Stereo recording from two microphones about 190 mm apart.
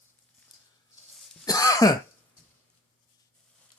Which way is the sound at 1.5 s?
20° left (ahead or behind).